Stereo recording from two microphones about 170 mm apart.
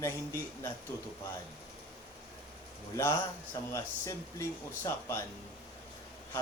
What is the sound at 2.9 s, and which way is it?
A man's voice, 15° left (ahead or behind).